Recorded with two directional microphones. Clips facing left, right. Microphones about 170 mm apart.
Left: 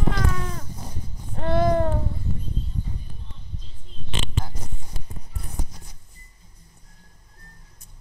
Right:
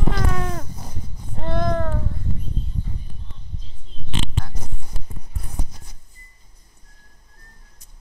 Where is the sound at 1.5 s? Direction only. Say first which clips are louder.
Left 3 dB; 10° left (ahead or behind).